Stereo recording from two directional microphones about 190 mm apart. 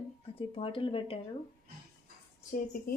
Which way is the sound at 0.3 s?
30° left (ahead or behind).